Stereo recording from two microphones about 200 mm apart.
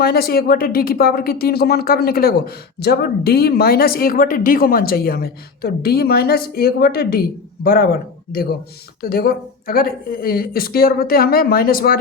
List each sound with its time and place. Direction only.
0.0 s speech: 50° left (ahead or behind)
9.0 s speech: 50° left (ahead or behind)